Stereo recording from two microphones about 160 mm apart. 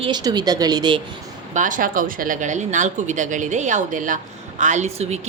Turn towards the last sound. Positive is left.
turn(degrees=-45)  # may be behind; listen again after turning